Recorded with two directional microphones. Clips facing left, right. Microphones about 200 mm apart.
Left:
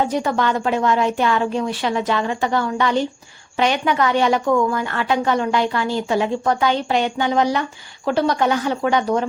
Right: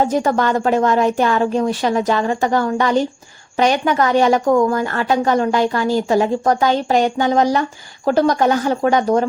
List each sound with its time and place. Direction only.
0.0 s a woman's voice: 45° right (ahead or behind)